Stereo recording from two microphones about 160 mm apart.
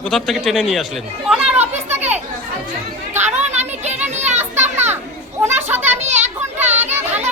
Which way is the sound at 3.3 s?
45° right (ahead or behind).